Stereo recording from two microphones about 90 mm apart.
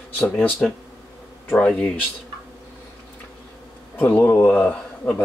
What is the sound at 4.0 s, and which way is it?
Speech, 15° left (ahead or behind).